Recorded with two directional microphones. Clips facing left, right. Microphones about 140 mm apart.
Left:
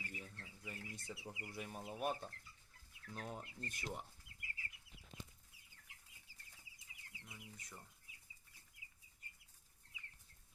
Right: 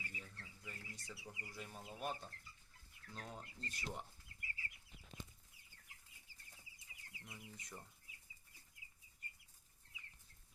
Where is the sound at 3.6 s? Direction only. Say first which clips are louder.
Left 2 dB; 50° left (ahead or behind).